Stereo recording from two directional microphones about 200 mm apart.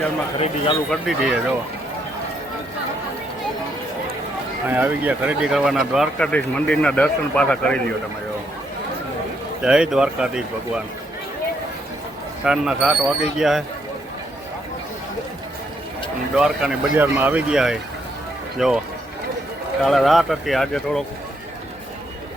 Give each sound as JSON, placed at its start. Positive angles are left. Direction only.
{"t": 0.3, "sound": "speech", "side_deg": 30}
{"t": 0.9, "sound": "speech", "side_deg": 0}
{"t": 4.7, "sound": "speech", "side_deg": -10}
{"t": 9.6, "sound": "speech", "side_deg": -5}
{"t": 12.5, "sound": "speech", "side_deg": -5}
{"t": 16.4, "sound": "speech", "side_deg": -5}
{"t": 19.8, "sound": "speech", "side_deg": 0}